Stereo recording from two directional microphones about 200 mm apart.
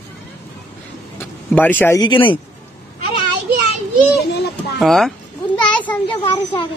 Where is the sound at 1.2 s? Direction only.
10° left (ahead or behind); by 2.4 s 25° left (ahead or behind).